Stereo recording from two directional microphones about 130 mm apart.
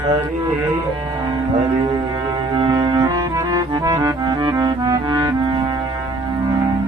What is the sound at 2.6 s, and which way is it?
Music, 35° right (ahead or behind).